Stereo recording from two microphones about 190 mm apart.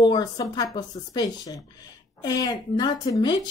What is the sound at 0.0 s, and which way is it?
Speech, 20° left (ahead or behind).